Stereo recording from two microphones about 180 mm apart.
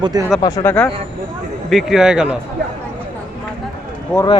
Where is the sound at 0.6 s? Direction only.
10° left (ahead or behind).